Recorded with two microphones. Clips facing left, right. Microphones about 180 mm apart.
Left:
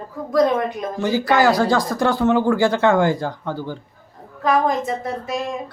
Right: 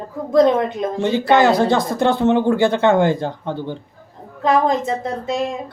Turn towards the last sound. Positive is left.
turn(degrees=-25)  # may be behind; listen again after turning